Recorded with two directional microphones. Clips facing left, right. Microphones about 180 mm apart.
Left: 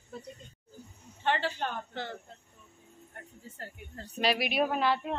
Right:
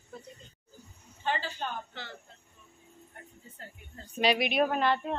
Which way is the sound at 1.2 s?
65° left (ahead or behind).